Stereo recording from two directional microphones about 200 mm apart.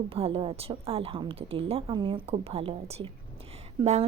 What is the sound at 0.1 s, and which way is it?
A woman's voice, 30° right (ahead or behind).